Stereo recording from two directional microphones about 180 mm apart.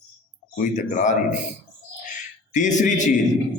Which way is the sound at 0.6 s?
45° left (ahead or behind).